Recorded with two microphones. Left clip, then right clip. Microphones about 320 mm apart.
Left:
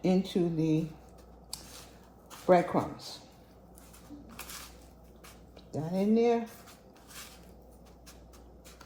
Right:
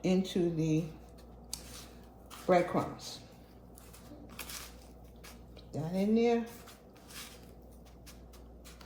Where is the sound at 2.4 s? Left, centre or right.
Centre.